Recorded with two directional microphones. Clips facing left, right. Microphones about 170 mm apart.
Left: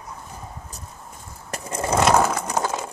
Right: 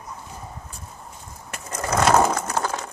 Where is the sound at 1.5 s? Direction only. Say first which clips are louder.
Left 3 dB; 30° left (ahead or behind).